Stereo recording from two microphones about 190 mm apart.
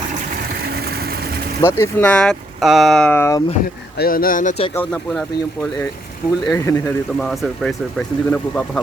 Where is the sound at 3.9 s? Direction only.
50° left (ahead or behind).